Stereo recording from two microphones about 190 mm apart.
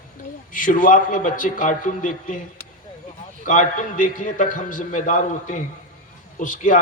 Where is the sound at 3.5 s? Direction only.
45° left (ahead or behind).